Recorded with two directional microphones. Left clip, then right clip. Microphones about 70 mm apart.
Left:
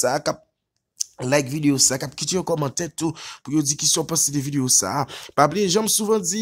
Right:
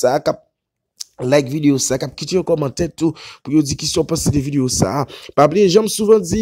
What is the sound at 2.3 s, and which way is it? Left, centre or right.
Speech, right.